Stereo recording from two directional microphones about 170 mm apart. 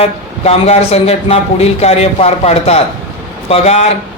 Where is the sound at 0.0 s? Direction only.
35° left (ahead or behind).